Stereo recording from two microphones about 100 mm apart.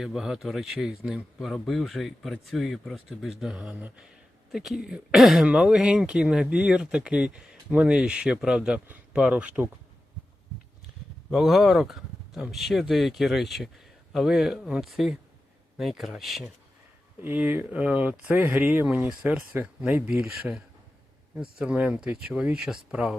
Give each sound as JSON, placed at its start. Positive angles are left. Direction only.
{"t": 0.0, "sound": "speech", "side_deg": -5}
{"t": 3.7, "sound": "speech", "side_deg": -15}
{"t": 11.3, "sound": "speech", "side_deg": 0}
{"t": 17.2, "sound": "speech", "side_deg": -20}
{"t": 20.5, "sound": "speech", "side_deg": 5}
{"t": 21.6, "sound": "speech", "side_deg": -10}